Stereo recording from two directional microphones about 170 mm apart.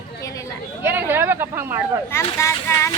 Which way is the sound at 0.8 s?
10° right (ahead or behind).